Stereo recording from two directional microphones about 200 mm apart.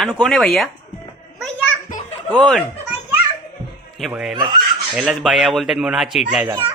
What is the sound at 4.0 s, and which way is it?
Speech, centre (ahead or behind).